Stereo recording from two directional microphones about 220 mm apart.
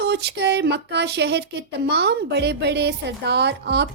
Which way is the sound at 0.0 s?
50° right (ahead or behind).